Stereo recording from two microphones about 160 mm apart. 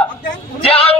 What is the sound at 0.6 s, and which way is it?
Speech, 35° left (ahead or behind).